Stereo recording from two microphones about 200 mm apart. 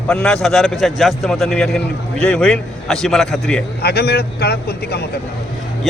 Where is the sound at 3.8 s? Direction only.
55° left (ahead or behind).